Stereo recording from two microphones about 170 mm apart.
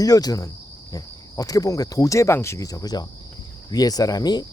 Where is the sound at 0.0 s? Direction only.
20° left (ahead or behind).